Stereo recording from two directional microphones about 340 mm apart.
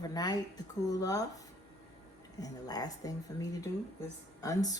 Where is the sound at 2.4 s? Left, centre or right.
Centre.